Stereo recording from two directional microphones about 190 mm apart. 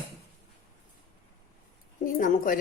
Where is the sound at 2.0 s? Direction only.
45° left (ahead or behind).